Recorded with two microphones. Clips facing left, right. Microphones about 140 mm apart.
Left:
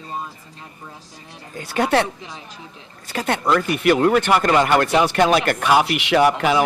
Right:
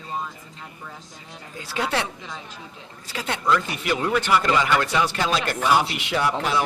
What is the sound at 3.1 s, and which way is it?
Speech, 55° left (ahead or behind).